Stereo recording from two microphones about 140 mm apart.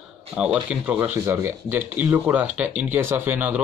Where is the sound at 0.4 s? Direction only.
10° right (ahead or behind).